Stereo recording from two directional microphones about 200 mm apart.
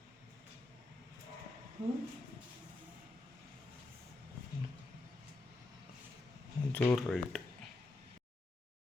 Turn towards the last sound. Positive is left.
turn(degrees=10)  # may be behind; listen again after turning